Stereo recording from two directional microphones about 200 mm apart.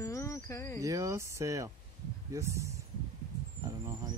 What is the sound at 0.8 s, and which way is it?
Speech, 15° right (ahead or behind).